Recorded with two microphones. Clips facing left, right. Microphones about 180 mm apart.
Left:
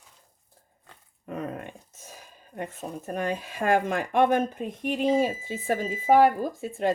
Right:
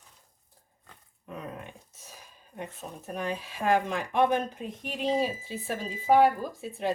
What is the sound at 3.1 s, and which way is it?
Speech, 50° left (ahead or behind).